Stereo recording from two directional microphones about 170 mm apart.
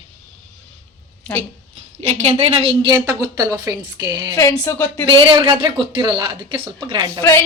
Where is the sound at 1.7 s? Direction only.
40° right (ahead or behind); by 4.1 s 20° right (ahead or behind).